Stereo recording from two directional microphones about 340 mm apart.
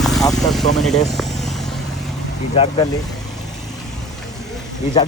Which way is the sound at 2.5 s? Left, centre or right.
Centre.